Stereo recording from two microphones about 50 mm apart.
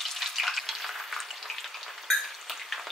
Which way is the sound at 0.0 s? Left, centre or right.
Centre.